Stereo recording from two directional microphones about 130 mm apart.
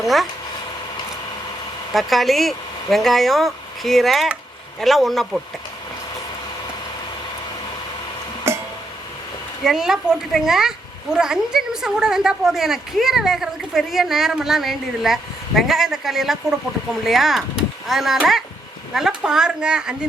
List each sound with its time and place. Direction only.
0.0 s speech: centre (ahead or behind)
1.9 s speech: centre (ahead or behind)
8.5 s a sound: 20° right (ahead or behind)
9.6 s speech: 5° right (ahead or behind)